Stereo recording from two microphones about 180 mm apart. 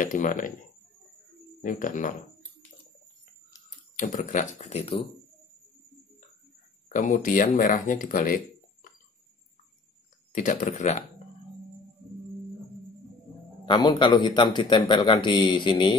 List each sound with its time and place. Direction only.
0.0 s speech: 45° left (ahead or behind)
1.6 s speech: 45° left (ahead or behind)
4.0 s speech: 40° left (ahead or behind)
6.9 s speech: 45° left (ahead or behind)
10.3 s speech: 45° left (ahead or behind)
13.7 s a man's voice: 25° left (ahead or behind)